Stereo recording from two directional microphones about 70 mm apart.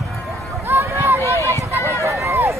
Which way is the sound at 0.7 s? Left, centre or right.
Right.